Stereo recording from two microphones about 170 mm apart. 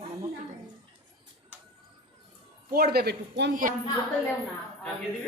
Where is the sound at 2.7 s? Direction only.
65° right (ahead or behind).